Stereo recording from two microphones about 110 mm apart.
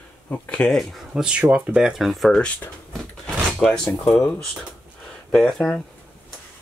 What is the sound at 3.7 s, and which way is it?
Speech, 5° left (ahead or behind).